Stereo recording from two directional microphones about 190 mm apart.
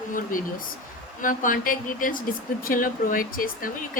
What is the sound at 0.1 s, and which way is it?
A woman's voice, 45° left (ahead or behind).